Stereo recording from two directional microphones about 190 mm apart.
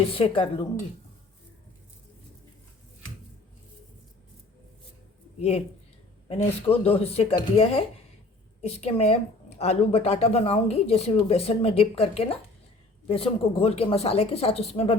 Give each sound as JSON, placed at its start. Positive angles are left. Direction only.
{"t": 0.1, "sound": "a woman's voice", "side_deg": 30}
{"t": 5.4, "sound": "speech", "side_deg": 35}